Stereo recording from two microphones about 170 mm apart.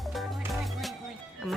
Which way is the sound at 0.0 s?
Centre (ahead or behind).